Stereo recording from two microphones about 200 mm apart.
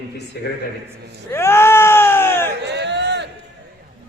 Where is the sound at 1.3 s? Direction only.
10° left (ahead or behind).